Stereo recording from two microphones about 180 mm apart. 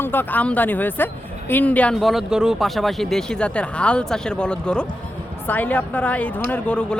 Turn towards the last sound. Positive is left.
turn(degrees=5)  # may be behind; listen again after turning